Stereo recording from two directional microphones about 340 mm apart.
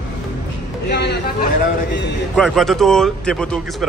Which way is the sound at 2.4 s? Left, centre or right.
Centre.